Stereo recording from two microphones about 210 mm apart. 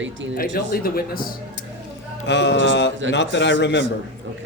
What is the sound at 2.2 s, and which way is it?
Speech, 55° left (ahead or behind).